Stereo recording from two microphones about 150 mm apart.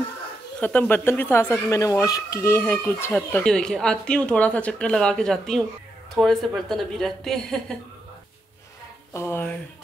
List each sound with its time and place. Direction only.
0.6 s speech: 10° left (ahead or behind)
9.1 s speech: 15° left (ahead or behind)